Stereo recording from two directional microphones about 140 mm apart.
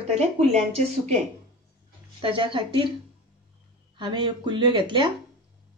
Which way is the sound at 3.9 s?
35° right (ahead or behind).